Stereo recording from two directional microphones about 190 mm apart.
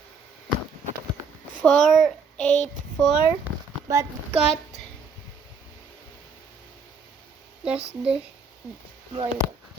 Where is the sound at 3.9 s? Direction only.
15° right (ahead or behind).